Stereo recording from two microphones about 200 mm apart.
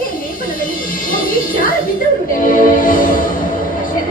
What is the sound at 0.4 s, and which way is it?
Music, 45° left (ahead or behind).